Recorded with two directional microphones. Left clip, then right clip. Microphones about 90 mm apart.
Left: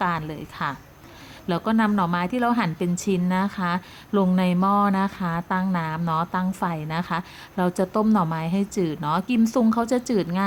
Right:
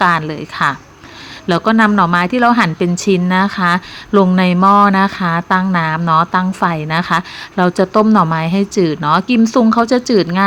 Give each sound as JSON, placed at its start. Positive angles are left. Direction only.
{"t": 0.0, "sound": "a woman's voice", "side_deg": -25}